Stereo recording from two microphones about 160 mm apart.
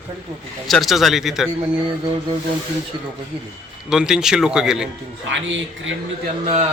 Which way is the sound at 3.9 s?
5° right (ahead or behind).